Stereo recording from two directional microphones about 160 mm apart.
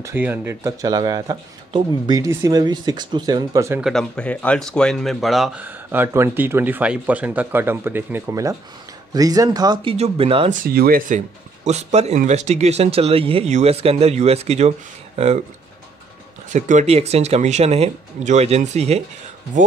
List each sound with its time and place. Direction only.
0.0 s speech: 10° right (ahead or behind)
3.8 s speech: 5° left (ahead or behind); by 9.9 s 25° right (ahead or behind)
9.9 s speech: 40° right (ahead or behind)
10.5 s speech: 65° right (ahead or behind); by 15.4 s 40° right (ahead or behind)
16.4 s speech: 50° right (ahead or behind)